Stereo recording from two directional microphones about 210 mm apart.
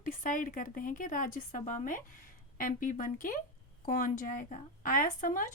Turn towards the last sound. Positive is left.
turn(degrees=40)  # may be behind; listen again after turning